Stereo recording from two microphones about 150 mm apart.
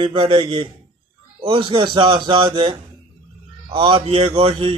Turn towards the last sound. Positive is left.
turn(degrees=-40)  # may be behind; listen again after turning